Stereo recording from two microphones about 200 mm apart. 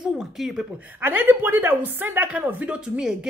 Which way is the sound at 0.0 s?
Centre (ahead or behind).